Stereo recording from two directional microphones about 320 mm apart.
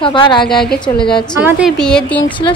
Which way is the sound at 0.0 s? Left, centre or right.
Centre.